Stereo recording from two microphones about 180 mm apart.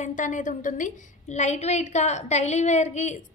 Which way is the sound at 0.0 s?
45° left (ahead or behind).